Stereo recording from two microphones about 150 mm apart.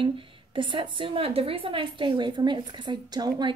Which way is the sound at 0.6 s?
30° right (ahead or behind).